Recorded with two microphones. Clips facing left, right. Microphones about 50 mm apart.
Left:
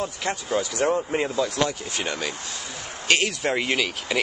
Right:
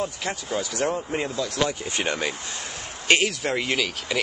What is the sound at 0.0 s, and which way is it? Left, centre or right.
Speech, centre.